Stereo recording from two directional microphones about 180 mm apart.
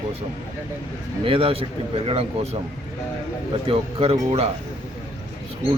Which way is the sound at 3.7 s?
30° right (ahead or behind).